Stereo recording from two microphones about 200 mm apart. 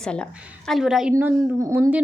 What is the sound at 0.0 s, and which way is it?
A woman's voice, 5° left (ahead or behind).